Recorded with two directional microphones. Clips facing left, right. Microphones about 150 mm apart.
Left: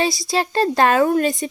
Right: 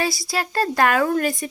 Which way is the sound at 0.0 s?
20° left (ahead or behind).